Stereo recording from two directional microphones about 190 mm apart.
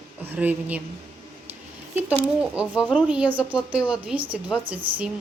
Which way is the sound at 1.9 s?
10° right (ahead or behind).